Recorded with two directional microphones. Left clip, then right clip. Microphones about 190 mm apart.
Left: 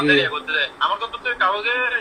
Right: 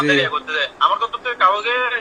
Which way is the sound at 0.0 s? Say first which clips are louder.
Right 1 dB; 25° right (ahead or behind).